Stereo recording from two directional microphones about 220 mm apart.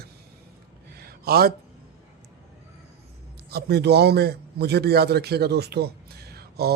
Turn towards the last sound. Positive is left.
turn(degrees=-45)  # may be behind; listen again after turning